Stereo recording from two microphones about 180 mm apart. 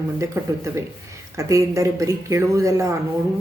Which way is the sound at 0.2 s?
15° right (ahead or behind).